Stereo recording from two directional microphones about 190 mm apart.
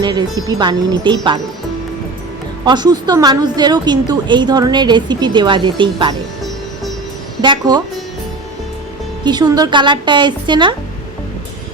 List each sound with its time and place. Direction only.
0.0 s a woman's voice: 20° right (ahead or behind)
2.6 s a woman's voice: 20° right (ahead or behind)
7.4 s a woman's voice: 25° right (ahead or behind)
9.2 s a woman's voice: 20° right (ahead or behind)